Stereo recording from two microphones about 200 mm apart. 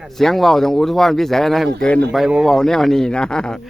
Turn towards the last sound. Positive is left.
turn(degrees=5)  # may be behind; listen again after turning